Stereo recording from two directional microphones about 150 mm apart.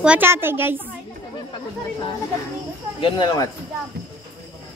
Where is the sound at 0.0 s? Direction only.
10° right (ahead or behind).